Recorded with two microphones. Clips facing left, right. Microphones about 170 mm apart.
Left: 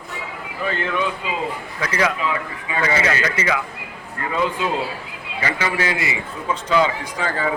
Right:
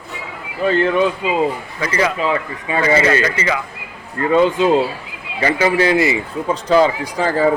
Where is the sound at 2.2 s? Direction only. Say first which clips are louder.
Right 5 dB; 35° right (ahead or behind).